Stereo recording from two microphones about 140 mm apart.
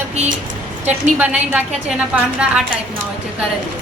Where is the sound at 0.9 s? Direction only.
10° right (ahead or behind).